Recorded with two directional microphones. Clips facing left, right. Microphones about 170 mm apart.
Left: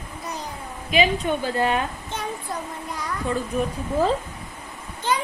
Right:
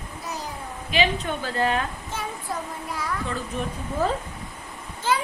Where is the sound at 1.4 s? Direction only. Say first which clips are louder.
Right 2 dB; 15° left (ahead or behind).